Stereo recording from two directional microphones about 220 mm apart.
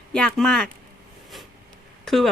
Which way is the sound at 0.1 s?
5° left (ahead or behind).